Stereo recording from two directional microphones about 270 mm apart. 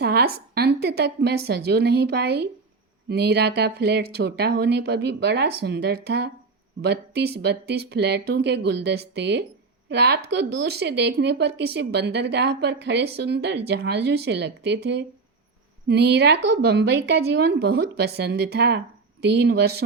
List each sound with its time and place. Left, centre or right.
0.0 s speech: right